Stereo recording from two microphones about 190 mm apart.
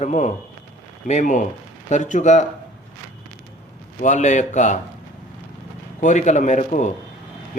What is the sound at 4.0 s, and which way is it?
Speech, 40° left (ahead or behind).